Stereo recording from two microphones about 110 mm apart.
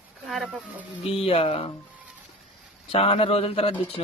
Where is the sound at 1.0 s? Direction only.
60° left (ahead or behind).